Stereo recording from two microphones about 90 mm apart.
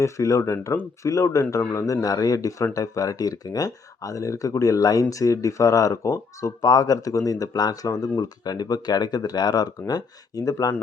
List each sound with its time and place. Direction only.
0.0 s speech: 35° left (ahead or behind)